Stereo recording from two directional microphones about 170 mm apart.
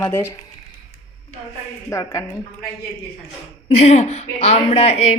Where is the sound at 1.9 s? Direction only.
20° left (ahead or behind).